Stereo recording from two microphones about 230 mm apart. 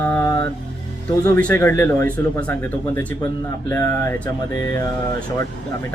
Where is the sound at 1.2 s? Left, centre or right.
Centre.